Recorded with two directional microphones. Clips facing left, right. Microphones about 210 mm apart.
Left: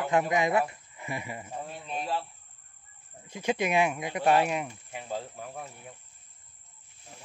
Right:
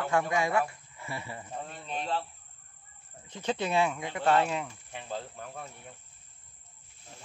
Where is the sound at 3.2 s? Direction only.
10° left (ahead or behind).